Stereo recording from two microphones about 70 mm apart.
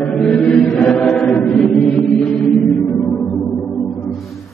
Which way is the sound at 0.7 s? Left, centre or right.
Centre.